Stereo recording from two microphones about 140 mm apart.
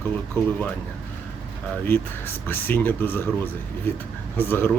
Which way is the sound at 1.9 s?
15° left (ahead or behind).